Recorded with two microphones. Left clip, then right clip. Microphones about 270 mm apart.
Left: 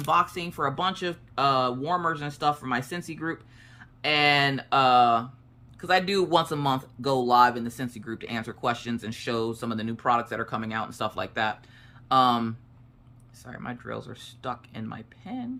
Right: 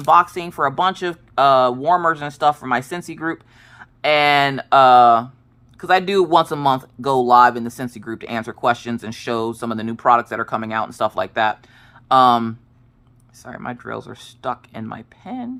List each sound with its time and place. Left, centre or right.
0.0 s speech: centre